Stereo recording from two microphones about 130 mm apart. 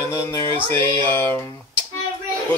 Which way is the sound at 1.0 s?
15° left (ahead or behind).